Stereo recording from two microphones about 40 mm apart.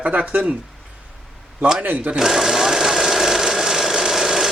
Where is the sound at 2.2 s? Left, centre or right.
Centre.